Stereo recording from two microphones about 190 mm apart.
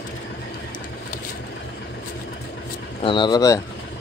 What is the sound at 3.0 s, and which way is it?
Speech, 25° left (ahead or behind).